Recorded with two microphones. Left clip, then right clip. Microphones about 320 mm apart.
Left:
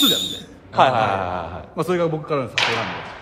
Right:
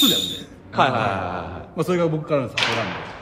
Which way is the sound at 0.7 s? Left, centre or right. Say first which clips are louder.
Left 3 dB; left.